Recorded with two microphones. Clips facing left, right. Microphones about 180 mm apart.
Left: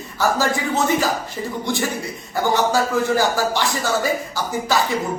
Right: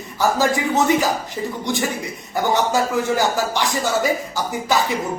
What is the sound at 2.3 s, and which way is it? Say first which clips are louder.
A man's voice: even; 20° right (ahead or behind).